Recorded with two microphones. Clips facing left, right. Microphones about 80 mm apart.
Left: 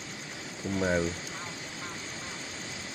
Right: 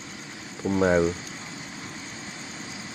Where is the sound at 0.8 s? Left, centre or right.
Right.